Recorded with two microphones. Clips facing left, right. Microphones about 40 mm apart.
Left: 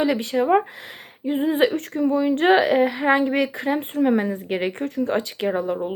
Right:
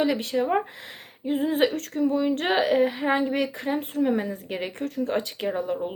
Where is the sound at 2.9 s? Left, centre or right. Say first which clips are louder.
Left 5 dB; left.